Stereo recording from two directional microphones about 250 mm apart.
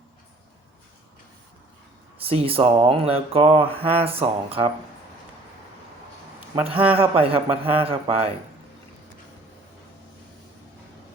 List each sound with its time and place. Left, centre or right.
2.2 s speech: right
6.9 s speech: right